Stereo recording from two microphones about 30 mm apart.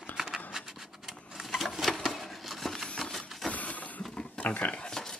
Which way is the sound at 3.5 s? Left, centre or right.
Left.